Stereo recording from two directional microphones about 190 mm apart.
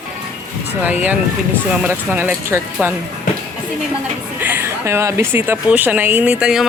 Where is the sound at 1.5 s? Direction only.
10° right (ahead or behind).